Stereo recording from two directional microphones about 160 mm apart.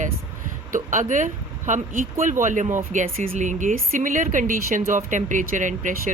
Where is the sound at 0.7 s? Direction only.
55° right (ahead or behind).